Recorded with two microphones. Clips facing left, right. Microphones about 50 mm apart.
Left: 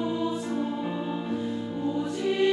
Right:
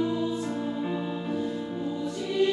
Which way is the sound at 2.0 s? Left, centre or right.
Left.